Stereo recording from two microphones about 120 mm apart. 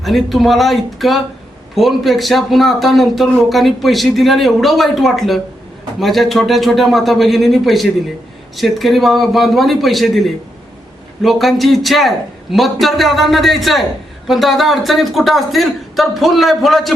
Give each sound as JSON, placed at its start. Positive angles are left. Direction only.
{"t": 0.0, "sound": "speech", "side_deg": 0}